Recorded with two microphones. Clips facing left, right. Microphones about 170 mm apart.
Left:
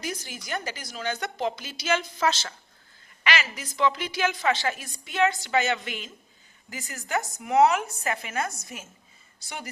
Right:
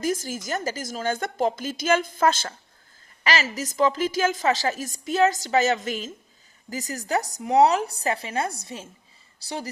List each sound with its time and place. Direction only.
0.0 s a woman's voice: 45° right (ahead or behind)